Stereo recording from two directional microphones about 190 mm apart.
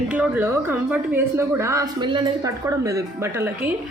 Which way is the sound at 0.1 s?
10° right (ahead or behind).